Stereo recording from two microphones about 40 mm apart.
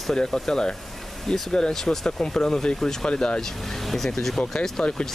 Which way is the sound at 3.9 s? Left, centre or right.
Centre.